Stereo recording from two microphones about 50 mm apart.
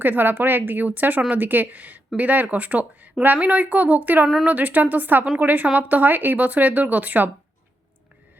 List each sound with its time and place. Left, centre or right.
0.0 s speech: right